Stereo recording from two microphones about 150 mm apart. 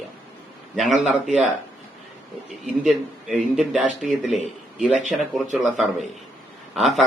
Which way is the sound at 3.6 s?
5° right (ahead or behind).